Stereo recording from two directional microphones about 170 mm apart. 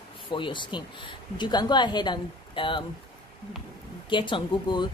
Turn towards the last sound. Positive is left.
turn(degrees=25)  # may be behind; listen again after turning